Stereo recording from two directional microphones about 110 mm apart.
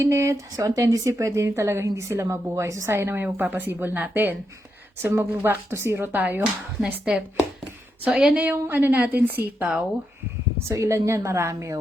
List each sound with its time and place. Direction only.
0.0 s a woman's voice: 25° right (ahead or behind)
10.7 s speech: 30° right (ahead or behind)